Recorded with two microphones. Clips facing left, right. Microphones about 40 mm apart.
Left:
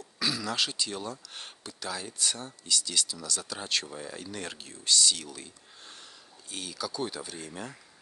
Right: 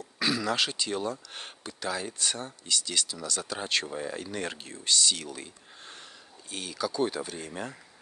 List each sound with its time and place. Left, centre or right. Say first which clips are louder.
0.2 s speech: right 3 dB; right